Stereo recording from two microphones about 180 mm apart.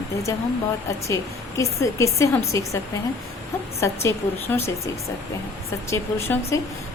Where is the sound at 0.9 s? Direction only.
15° left (ahead or behind).